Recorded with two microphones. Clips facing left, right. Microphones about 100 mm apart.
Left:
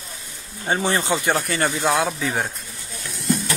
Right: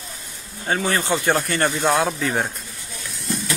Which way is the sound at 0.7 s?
25° left (ahead or behind).